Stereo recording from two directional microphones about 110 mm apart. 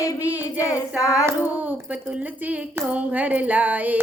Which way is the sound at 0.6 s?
30° left (ahead or behind).